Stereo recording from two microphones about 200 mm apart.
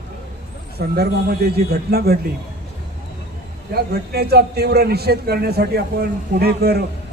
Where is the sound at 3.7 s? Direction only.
50° right (ahead or behind).